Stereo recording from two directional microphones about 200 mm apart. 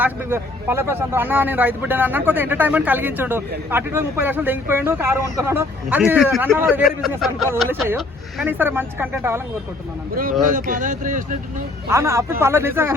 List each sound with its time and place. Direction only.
0.0 s speech: 10° right (ahead or behind)
6.8 s speech: centre (ahead or behind)
8.4 s speech: 10° right (ahead or behind)
10.5 s speech: 40° right (ahead or behind)
11.9 s speech: 15° right (ahead or behind)